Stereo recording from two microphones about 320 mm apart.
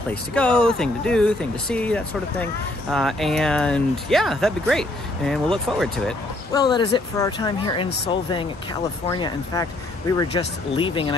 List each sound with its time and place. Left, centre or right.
0.1 s speech: centre
6.5 s speech: centre